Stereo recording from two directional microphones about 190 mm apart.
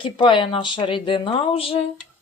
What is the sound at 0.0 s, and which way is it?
Speech, 25° left (ahead or behind).